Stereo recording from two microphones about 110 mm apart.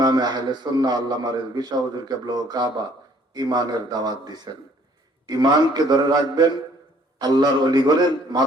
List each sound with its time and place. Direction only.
0.0 s a man's voice: 35° right (ahead or behind)